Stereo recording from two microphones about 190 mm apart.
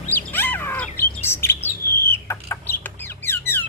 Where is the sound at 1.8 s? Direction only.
55° left (ahead or behind).